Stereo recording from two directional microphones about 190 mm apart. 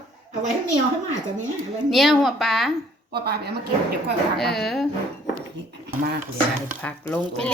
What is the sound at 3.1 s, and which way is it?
Speech, 55° right (ahead or behind).